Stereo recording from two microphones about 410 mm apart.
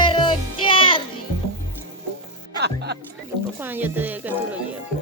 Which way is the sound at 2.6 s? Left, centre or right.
Right.